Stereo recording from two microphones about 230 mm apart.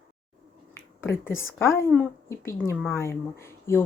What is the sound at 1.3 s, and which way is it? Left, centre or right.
Speech, left.